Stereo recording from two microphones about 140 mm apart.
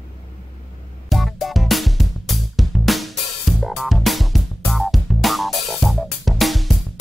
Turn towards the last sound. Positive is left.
turn(degrees=0)  # may be behind; listen again after turning